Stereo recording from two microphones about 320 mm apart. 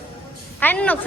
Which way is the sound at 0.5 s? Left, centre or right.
Centre.